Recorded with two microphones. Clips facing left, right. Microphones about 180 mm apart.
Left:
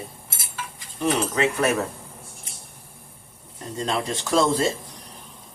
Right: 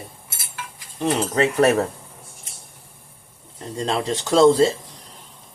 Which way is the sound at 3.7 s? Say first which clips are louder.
Right 3 dB; 30° right (ahead or behind).